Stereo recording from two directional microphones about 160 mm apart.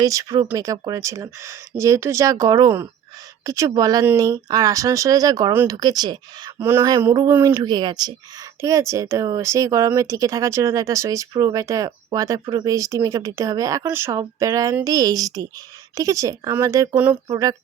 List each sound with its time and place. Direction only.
0.0 s speech: 20° right (ahead or behind)
6.6 s a sound: 15° right (ahead or behind)
7.5 s speech: 25° right (ahead or behind); by 17.2 s 10° right (ahead or behind)
17.2 s speech: 20° right (ahead or behind)